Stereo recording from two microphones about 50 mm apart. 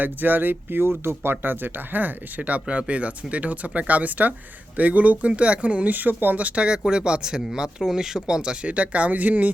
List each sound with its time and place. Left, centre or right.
0.0 s speech: right
6.7 s speech: centre; by 9.5 s right